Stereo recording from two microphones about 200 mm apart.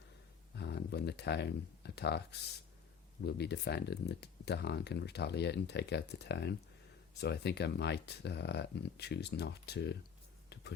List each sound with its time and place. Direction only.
0.5 s speech: 55° left (ahead or behind)
3.2 s speech: 55° left (ahead or behind)